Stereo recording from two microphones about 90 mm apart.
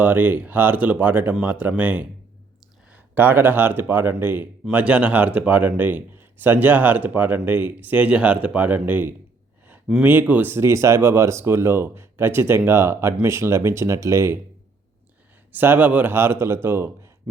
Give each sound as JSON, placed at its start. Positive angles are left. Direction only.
{"t": 0.0, "sound": "speech", "side_deg": -20}
{"t": 15.5, "sound": "speech", "side_deg": -20}